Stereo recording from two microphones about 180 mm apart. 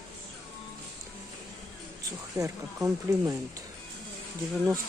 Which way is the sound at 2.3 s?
15° right (ahead or behind).